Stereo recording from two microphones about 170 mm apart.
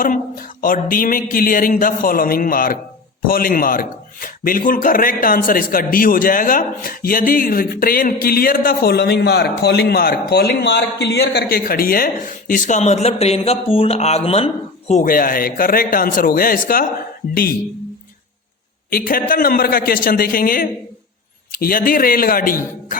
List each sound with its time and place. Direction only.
0.0 s speech: 55° left (ahead or behind)
15.0 s speech: 55° left (ahead or behind)
18.9 s speech: 60° left (ahead or behind)